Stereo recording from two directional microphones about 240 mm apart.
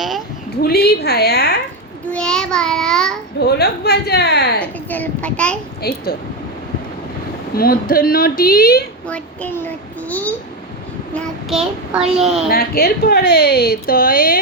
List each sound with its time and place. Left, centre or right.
0.5 s speech: left
2.1 s a child's voice: centre
3.4 s a woman's voice: left
4.6 s a child's voice: centre
5.8 s speech: left
7.5 s speech: left
9.0 s a child's voice: centre
12.5 s speech: left